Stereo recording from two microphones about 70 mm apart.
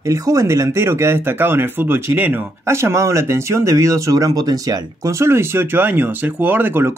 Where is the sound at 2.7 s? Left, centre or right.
Right.